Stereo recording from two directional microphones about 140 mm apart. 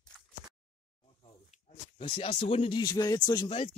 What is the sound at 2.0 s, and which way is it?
Speech, 40° left (ahead or behind).